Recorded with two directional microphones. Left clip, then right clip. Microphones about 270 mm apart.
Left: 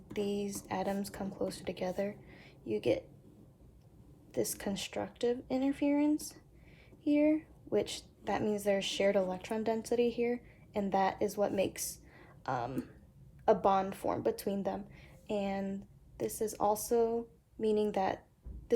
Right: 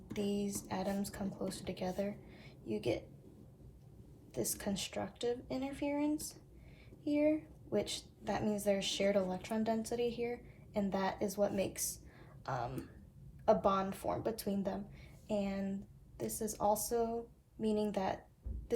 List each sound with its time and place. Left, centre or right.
0.1 s a woman's voice: left
4.3 s a woman's voice: left